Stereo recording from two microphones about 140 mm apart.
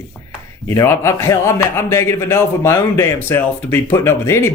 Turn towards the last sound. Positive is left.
turn(degrees=20)  # may be behind; listen again after turning